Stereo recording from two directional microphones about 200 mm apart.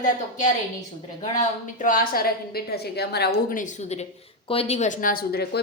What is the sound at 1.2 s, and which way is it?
A woman's voice, 40° left (ahead or behind).